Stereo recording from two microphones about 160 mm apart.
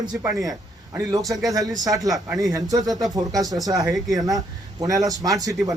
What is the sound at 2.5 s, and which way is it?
Speech, 20° right (ahead or behind).